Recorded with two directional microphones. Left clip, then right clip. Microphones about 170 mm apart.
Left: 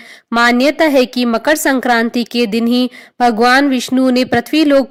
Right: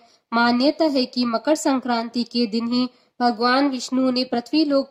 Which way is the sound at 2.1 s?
35° left (ahead or behind).